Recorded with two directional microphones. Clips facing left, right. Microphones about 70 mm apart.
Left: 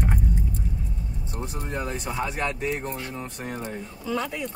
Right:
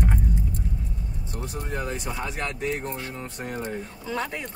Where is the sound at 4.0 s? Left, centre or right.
Right.